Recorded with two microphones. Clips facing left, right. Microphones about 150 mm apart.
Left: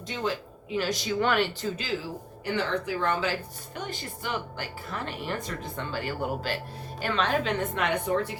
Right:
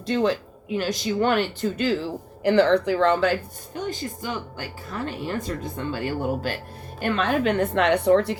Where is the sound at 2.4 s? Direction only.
85° right; by 3.3 s 70° right (ahead or behind).